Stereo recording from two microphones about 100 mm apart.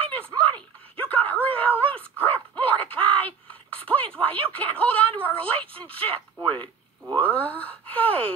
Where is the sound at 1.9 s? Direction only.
15° left (ahead or behind).